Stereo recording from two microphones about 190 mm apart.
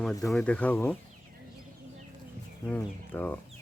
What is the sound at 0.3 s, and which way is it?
Speech, 5° left (ahead or behind).